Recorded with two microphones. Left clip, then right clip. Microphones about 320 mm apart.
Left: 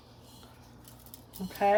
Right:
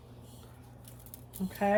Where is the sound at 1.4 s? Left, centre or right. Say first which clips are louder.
Right 2 dB; left.